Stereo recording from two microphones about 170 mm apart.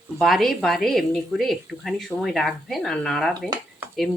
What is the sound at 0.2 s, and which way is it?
A woman's voice, centre (ahead or behind).